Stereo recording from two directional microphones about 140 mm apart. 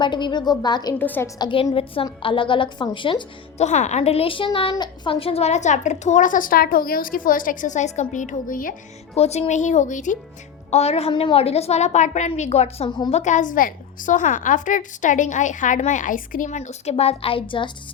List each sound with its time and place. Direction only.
0.0 s a woman's voice: 35° left (ahead or behind)
0.9 s a woman's voice: 15° left (ahead or behind)
1.4 s a woman's voice: 35° left (ahead or behind)
3.6 s a woman's voice: 55° left (ahead or behind); by 8.7 s 75° left (ahead or behind)
9.1 s a woman's voice: 50° left (ahead or behind); by 10.2 s 65° left (ahead or behind)
10.7 s a woman's voice: 50° left (ahead or behind)